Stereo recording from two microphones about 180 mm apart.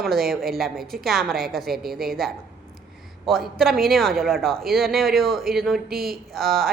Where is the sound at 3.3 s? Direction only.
Centre (ahead or behind).